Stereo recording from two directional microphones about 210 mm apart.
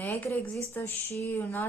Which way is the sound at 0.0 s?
10° left (ahead or behind).